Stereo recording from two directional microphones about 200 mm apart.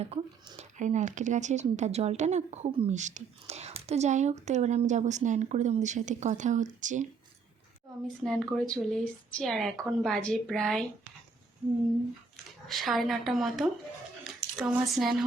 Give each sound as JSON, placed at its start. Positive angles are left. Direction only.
{"t": 0.0, "sound": "speech", "side_deg": -30}
{"t": 8.2, "sound": "a woman's voice", "side_deg": 5}
{"t": 12.6, "sound": "a woman's voice", "side_deg": 0}